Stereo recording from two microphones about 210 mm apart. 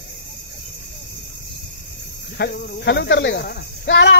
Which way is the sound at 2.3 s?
50° left (ahead or behind).